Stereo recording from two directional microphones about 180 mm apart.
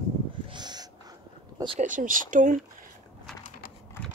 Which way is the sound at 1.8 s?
45° right (ahead or behind).